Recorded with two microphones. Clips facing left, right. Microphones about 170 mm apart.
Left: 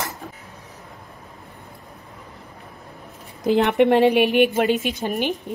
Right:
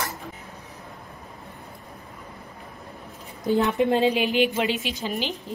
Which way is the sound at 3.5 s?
70° left (ahead or behind).